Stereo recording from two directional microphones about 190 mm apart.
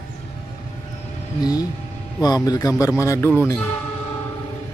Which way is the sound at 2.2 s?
20° left (ahead or behind).